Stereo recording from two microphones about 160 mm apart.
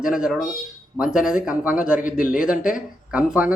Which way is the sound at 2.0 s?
60° left (ahead or behind).